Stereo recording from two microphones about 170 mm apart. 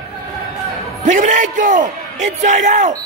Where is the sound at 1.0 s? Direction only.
45° right (ahead or behind).